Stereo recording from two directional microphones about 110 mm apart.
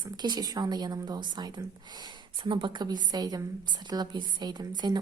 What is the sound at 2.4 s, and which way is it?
Speech, 50° right (ahead or behind).